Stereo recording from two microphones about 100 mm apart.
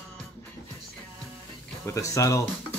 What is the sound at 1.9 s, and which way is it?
Speech, 35° left (ahead or behind).